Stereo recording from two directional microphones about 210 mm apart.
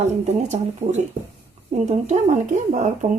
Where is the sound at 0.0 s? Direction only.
30° right (ahead or behind).